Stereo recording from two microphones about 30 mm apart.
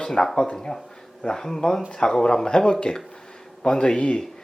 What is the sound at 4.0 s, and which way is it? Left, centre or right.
Speech, left.